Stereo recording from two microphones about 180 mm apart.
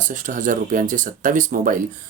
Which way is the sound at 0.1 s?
45° right (ahead or behind).